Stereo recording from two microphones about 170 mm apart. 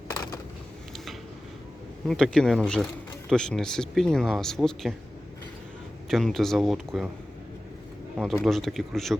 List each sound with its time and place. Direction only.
0.1 s a sound: 20° left (ahead or behind)
2.0 s speech: 5° left (ahead or behind)
6.1 s speech: centre (ahead or behind)
8.2 s speech: centre (ahead or behind)